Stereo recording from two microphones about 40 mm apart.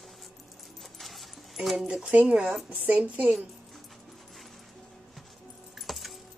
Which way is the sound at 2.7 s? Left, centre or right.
Right.